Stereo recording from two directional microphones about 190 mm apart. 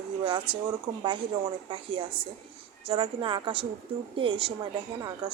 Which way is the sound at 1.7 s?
25° right (ahead or behind).